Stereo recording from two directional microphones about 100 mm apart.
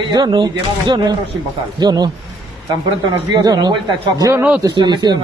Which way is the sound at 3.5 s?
40° right (ahead or behind).